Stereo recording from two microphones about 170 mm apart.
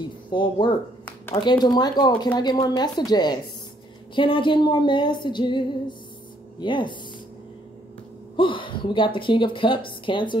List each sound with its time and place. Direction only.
0.3 s speech: 25° left (ahead or behind)
8.4 s speech: 30° left (ahead or behind)